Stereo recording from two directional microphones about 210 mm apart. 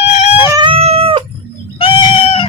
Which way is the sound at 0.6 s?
30° right (ahead or behind).